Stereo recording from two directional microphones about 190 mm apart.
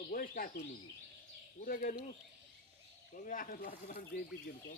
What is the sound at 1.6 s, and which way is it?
Speech, 45° left (ahead or behind).